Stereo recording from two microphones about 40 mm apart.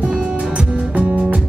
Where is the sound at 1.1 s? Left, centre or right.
Right.